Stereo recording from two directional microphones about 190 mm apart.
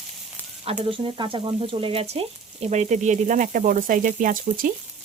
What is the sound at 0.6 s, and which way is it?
Speech, 30° right (ahead or behind).